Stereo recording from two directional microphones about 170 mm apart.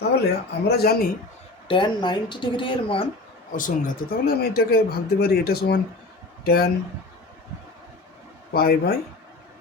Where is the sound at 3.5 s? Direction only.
50° left (ahead or behind).